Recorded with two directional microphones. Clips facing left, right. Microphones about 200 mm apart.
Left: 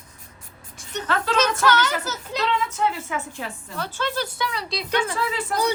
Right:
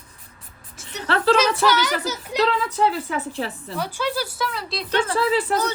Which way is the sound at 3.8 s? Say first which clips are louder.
Right 2 dB; 10° right (ahead or behind).